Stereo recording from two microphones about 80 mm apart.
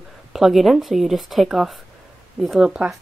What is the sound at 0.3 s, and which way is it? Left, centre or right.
A woman's voice, centre.